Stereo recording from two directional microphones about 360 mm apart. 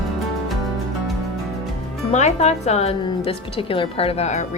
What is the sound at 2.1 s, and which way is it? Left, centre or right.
Speech, centre.